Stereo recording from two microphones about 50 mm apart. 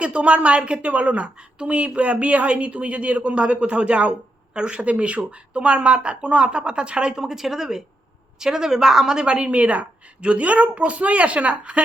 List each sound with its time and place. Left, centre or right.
0.0 s a woman's voice: right
7.2 s a woman's voice: centre; by 11.8 s right